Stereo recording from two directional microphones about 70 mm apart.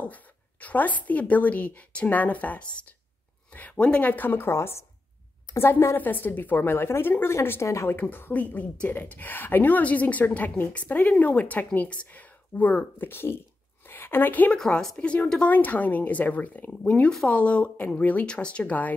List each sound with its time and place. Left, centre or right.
0.0 s speech: left
7.6 s speech: left
7.9 s a woman's voice: left
14.6 s speech: centre
15.0 s speech: left